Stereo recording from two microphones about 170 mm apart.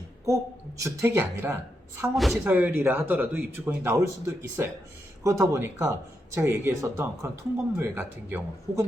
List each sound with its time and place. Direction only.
0.8 s speech: 15° right (ahead or behind)
2.1 s speech: centre (ahead or behind)
2.5 s speech: 10° right (ahead or behind)